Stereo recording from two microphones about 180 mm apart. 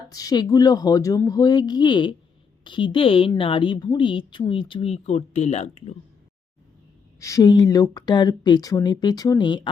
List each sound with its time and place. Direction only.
0.1 s speech: 20° left (ahead or behind); by 6.0 s 35° left (ahead or behind)
7.2 s speech: 15° left (ahead or behind)